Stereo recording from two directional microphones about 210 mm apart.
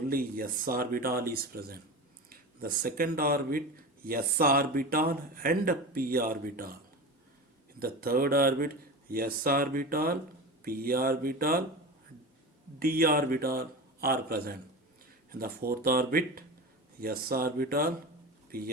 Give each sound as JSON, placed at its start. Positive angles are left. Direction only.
{"t": 0.1, "sound": "speech", "side_deg": -45}
{"t": 7.8, "sound": "speech", "side_deg": -45}
{"t": 12.8, "sound": "speech", "side_deg": -45}